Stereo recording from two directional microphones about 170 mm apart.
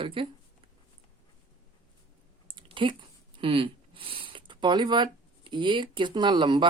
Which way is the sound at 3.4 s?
30° right (ahead or behind).